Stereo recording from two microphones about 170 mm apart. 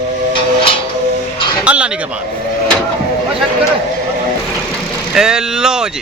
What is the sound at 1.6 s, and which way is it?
Speech, 5° right (ahead or behind).